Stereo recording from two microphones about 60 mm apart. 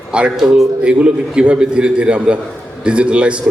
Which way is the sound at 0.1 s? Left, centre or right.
Centre.